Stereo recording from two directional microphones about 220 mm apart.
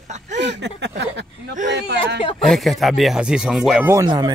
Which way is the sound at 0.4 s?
50° right (ahead or behind).